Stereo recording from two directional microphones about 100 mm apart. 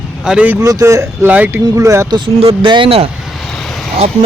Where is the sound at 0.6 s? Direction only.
35° right (ahead or behind).